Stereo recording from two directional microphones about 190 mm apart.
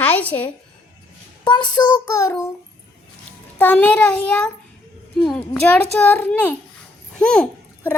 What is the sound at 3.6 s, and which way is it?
A child's voice, 10° left (ahead or behind).